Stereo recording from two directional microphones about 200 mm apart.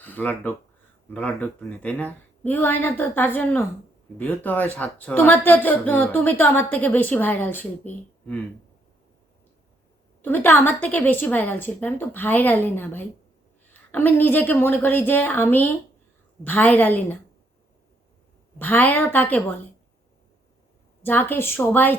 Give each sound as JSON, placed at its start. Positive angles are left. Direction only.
{"t": 0.0, "sound": "speech", "side_deg": 10}
{"t": 10.2, "sound": "speech", "side_deg": 10}
{"t": 18.6, "sound": "speech", "side_deg": 10}
{"t": 21.0, "sound": "speech", "side_deg": 10}